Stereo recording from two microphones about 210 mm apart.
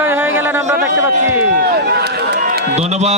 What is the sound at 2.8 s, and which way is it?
Speech, 30° right (ahead or behind).